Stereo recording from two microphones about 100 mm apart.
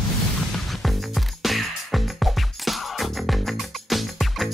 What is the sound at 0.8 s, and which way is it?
Music, centre (ahead or behind).